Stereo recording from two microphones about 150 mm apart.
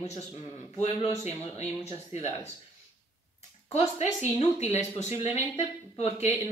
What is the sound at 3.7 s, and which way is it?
Speech, 45° left (ahead or behind).